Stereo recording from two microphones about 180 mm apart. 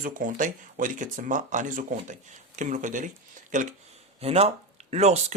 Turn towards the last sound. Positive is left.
turn(degrees=-35)  # may be behind; listen again after turning